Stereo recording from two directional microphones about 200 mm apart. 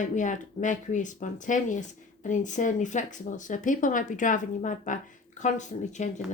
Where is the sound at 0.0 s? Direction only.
40° left (ahead or behind).